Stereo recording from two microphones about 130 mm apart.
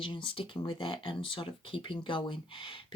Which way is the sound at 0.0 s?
40° left (ahead or behind).